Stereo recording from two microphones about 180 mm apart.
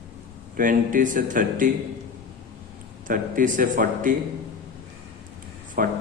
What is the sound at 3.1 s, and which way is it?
A man's voice, 45° right (ahead or behind).